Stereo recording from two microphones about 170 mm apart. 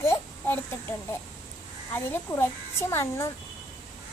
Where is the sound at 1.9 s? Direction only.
10° left (ahead or behind).